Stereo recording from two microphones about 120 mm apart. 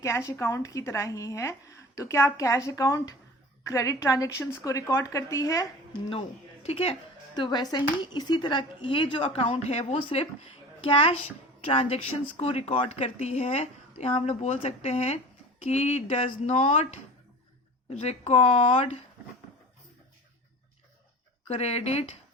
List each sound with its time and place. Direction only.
0.0 s a woman's voice: 25° left (ahead or behind)
6.1 s speech: 55° left (ahead or behind)
7.3 s a woman's voice: 35° left (ahead or behind); by 17.0 s 70° left (ahead or behind)
18.0 s speech: 65° left (ahead or behind)
21.4 s speech: 60° left (ahead or behind)